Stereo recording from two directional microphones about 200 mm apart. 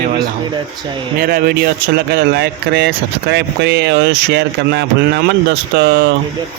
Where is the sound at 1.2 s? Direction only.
50° right (ahead or behind).